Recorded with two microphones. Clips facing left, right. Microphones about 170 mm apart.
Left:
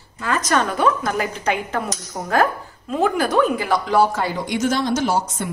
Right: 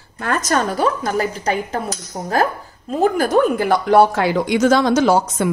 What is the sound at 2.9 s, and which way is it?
Speech, 45° right (ahead or behind).